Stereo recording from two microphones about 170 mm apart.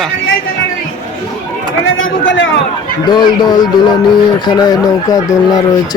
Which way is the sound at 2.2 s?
90° left.